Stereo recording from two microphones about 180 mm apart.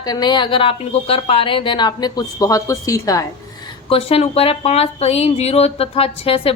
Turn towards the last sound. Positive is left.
turn(degrees=30)  # may be behind; listen again after turning